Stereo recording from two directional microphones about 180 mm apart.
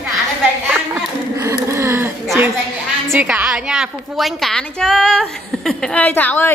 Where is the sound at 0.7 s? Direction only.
5° right (ahead or behind).